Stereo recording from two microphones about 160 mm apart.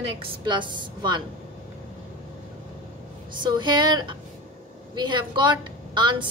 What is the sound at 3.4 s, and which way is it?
A woman's voice, 30° right (ahead or behind).